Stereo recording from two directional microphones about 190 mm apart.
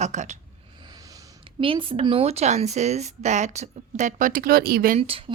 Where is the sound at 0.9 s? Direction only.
20° right (ahead or behind); by 5.0 s 50° right (ahead or behind).